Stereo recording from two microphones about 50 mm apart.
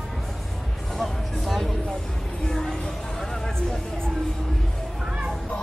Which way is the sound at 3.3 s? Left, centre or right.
Centre.